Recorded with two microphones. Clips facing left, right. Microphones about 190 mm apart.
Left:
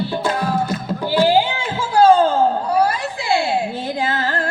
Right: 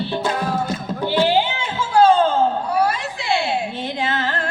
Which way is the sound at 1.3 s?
35° left (ahead or behind).